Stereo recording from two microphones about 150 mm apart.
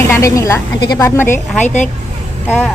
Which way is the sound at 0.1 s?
20° left (ahead or behind).